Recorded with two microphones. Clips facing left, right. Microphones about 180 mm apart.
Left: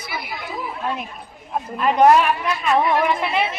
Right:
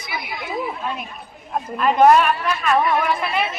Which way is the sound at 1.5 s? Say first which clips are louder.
Right 1 dB; 10° left (ahead or behind).